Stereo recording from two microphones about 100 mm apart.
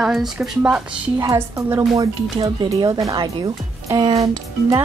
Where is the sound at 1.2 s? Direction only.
30° right (ahead or behind).